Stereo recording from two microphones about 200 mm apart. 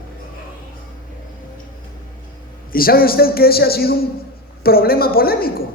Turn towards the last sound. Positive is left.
turn(degrees=50)  # may be behind; listen again after turning